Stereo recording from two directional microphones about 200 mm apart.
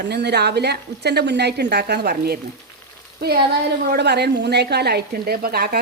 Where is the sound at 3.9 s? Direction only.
55° right (ahead or behind).